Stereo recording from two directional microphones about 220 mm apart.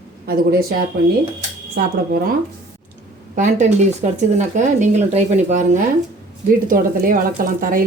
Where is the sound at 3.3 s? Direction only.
35° right (ahead or behind).